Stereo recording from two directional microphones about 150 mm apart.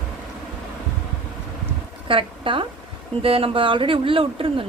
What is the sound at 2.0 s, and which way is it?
A woman's voice, 35° right (ahead or behind).